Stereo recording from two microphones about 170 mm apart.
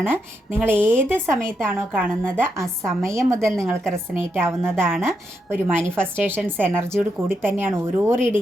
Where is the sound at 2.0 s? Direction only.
5° left (ahead or behind).